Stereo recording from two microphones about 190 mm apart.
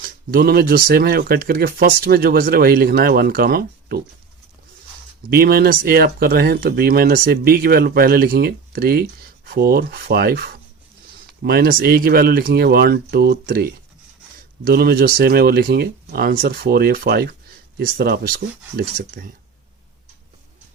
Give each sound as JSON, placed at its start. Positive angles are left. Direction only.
{"t": 0.0, "sound": "speech", "side_deg": -50}
{"t": 5.3, "sound": "speech", "side_deg": -55}